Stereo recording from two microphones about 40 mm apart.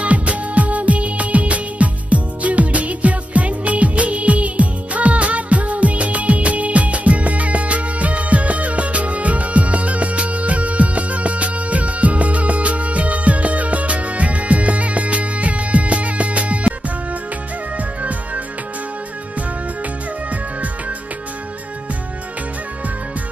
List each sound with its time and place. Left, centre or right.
0.0 s music: right